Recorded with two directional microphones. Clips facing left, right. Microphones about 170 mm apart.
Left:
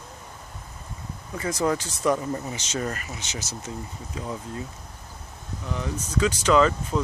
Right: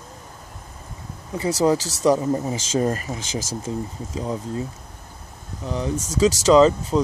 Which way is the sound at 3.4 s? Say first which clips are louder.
Right 7 dB; 90° right.